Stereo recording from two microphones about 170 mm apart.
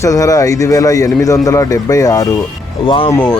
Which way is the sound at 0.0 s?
20° left (ahead or behind).